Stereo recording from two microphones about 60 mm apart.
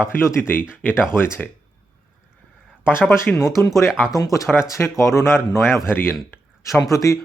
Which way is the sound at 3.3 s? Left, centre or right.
Centre.